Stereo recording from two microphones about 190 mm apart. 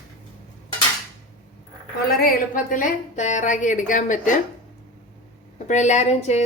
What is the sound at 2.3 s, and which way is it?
A woman's voice, 45° left (ahead or behind).